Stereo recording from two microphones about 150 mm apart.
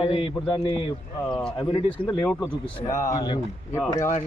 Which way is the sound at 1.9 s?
35° left (ahead or behind).